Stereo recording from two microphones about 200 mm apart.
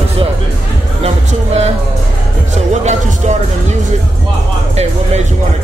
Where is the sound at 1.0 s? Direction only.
35° right (ahead or behind).